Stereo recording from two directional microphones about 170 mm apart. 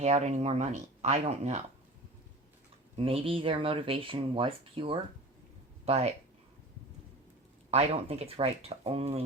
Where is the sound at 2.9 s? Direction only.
35° right (ahead or behind).